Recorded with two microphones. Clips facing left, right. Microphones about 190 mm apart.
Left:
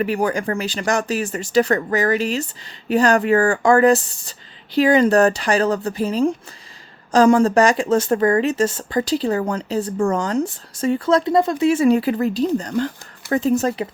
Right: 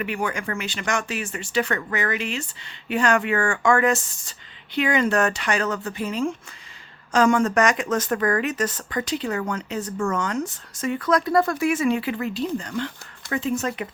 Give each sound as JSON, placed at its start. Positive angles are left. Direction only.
{"t": 0.0, "sound": "speech", "side_deg": 35}